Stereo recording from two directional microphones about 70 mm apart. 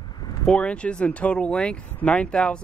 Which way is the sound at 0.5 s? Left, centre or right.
Centre.